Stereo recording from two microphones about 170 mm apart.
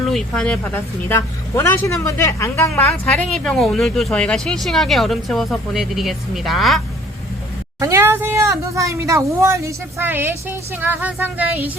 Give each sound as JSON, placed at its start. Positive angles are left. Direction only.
{"t": 0.1, "sound": "a woman's voice", "side_deg": 5}
{"t": 3.3, "sound": "speech", "side_deg": 5}
{"t": 7.8, "sound": "speech", "side_deg": -15}